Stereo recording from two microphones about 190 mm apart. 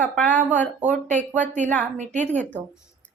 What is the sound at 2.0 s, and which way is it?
Speech, 40° right (ahead or behind).